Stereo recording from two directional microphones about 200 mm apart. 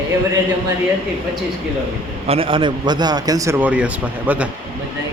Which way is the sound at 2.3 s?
25° right (ahead or behind).